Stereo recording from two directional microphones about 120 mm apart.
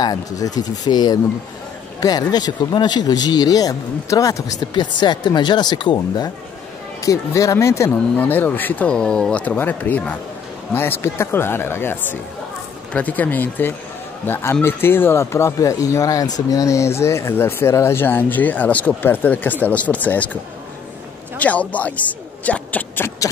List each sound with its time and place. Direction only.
0.0 s speech: 30° left (ahead or behind)
4.7 s speech: 40° left (ahead or behind)
7.0 s speech: 25° left (ahead or behind)
21.4 s speech: 10° left (ahead or behind)